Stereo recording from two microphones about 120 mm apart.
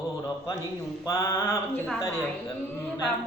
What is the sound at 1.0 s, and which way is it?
Speech, 25° left (ahead or behind).